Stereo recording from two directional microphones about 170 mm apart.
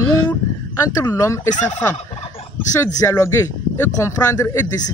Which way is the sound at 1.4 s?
45° left (ahead or behind).